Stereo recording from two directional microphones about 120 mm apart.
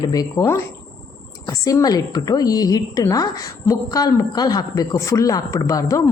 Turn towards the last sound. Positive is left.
turn(degrees=25)  # may be behind; listen again after turning